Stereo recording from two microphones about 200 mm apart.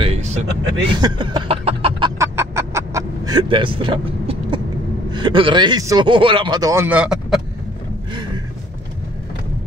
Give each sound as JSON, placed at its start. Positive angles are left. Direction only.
{"t": 0.0, "sound": "vehicle", "side_deg": -35}
{"t": 1.0, "sound": "a sound", "side_deg": -20}
{"t": 2.3, "sound": "vehicle", "side_deg": -15}
{"t": 5.1, "sound": "speech", "side_deg": -25}